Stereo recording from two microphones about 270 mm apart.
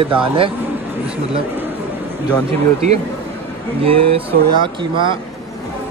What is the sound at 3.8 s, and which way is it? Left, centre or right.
Speech, right.